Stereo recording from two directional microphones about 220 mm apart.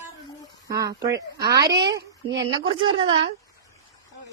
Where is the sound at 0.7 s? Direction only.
15° right (ahead or behind).